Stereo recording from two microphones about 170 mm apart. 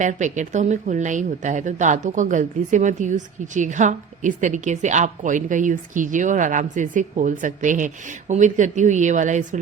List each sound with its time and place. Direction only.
0.0 s speech: 45° right (ahead or behind)